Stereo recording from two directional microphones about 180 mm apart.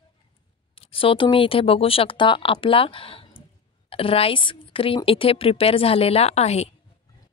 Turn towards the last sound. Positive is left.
turn(degrees=35)  # may be behind; listen again after turning